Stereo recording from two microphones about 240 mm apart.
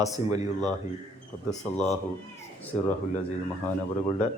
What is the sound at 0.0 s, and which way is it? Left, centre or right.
Speech, centre.